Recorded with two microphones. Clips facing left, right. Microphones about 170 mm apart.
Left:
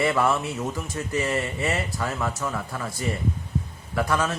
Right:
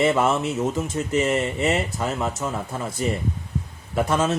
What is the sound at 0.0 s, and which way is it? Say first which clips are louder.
Speech: right 3 dB; 20° right (ahead or behind).